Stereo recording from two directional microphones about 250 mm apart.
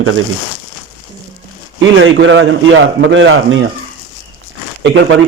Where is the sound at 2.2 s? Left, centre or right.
Right.